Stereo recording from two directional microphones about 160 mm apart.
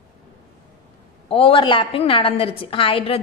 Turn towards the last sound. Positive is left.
turn(degrees=35)  # may be behind; listen again after turning